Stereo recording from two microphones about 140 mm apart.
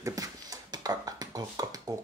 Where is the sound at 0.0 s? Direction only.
25° right (ahead or behind).